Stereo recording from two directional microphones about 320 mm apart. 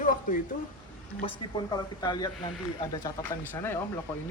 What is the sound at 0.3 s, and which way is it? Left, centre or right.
Speech, left.